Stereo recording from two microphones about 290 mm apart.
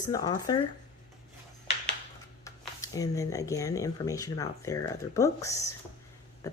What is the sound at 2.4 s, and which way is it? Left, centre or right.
Speech, centre.